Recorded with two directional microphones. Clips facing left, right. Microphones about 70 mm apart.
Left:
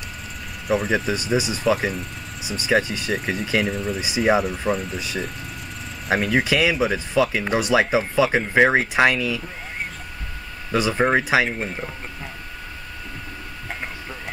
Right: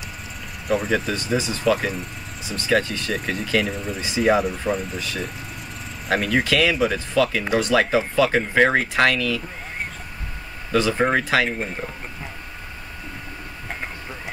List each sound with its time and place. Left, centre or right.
0.7 s speech: centre
1.1 s speech: centre
1.6 s speech: centre
2.4 s speech: centre
3.2 s speech: centre
6.0 s speech: centre
6.4 s speech: centre
10.7 s speech: centre
11.5 s speech: centre